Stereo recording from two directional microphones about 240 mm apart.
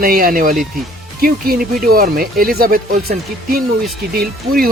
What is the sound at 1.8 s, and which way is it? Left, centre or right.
Speech, right.